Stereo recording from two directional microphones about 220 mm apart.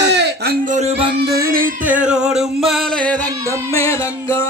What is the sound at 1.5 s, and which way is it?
Music, 40° right (ahead or behind).